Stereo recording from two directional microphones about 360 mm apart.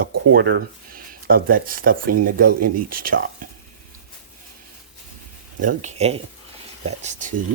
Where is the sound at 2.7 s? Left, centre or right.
Right.